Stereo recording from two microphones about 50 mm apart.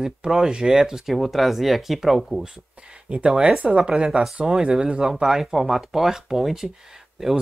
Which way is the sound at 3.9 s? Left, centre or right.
Centre.